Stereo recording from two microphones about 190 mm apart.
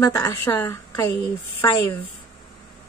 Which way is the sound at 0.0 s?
20° left (ahead or behind).